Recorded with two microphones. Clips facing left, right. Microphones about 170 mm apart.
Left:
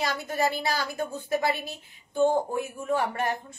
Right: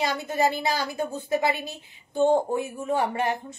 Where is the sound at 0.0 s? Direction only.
20° right (ahead or behind).